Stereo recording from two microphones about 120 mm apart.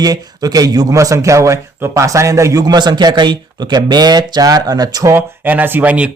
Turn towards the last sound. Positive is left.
turn(degrees=-10)  # may be behind; listen again after turning